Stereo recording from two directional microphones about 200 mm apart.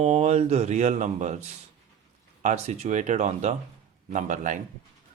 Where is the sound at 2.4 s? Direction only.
35° right (ahead or behind).